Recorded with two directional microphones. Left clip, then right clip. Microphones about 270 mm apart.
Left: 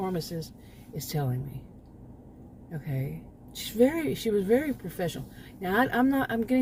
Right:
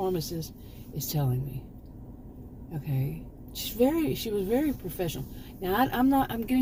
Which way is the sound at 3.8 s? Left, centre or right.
Left.